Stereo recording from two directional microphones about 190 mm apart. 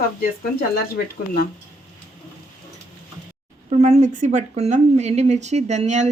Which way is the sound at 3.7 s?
35° right (ahead or behind).